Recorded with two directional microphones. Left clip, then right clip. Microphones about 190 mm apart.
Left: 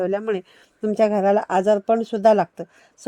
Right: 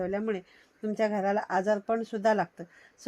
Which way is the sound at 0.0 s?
55° left (ahead or behind).